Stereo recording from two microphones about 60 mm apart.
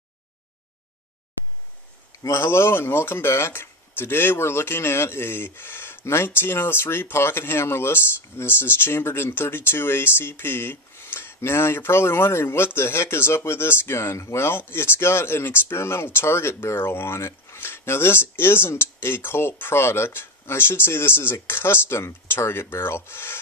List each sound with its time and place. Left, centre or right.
2.1 s speech: left